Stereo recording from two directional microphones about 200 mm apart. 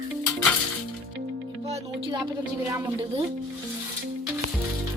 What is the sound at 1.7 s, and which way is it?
Music, 25° right (ahead or behind).